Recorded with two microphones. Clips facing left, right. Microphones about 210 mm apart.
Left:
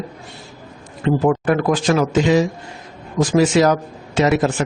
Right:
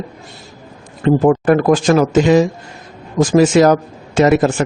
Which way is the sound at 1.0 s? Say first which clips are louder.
Right 5 dB; 45° right (ahead or behind).